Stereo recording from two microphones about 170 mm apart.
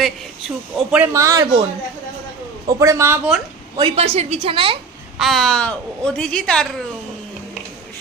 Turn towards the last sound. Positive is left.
turn(degrees=5)  # may be behind; listen again after turning